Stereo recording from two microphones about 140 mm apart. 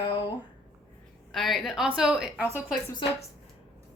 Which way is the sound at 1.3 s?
Centre (ahead or behind).